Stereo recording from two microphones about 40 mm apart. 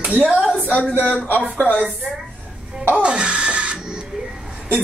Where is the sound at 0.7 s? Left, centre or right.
Left.